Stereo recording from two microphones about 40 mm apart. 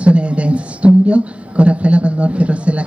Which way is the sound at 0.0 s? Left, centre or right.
Right.